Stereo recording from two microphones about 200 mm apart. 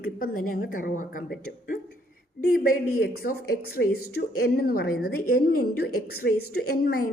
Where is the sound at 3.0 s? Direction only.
50° left (ahead or behind).